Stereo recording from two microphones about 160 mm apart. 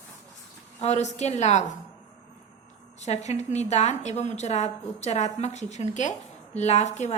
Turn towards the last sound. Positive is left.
turn(degrees=45)  # may be behind; listen again after turning